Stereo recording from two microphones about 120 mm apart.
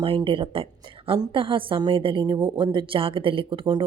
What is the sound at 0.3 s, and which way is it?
A woman's voice, 50° right (ahead or behind).